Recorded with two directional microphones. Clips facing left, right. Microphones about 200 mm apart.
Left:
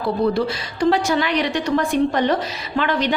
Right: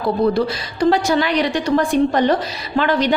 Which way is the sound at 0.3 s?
40° right (ahead or behind).